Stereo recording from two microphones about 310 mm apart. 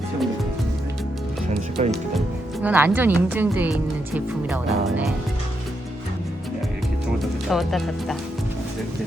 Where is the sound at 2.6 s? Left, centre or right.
Centre.